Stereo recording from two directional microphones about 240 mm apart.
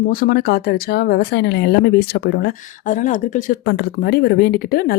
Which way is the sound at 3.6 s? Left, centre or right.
Left.